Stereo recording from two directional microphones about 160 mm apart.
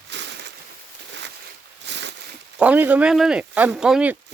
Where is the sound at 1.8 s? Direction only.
90° right.